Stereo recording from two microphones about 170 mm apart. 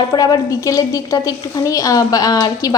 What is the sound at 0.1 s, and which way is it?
A woman's voice, 20° left (ahead or behind).